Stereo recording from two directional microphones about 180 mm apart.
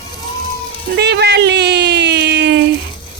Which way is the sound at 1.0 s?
65° right (ahead or behind).